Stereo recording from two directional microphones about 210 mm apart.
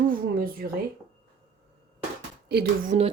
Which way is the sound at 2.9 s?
35° right (ahead or behind).